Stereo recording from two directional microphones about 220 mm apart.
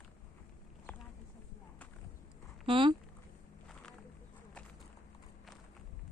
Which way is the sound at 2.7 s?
25° right (ahead or behind).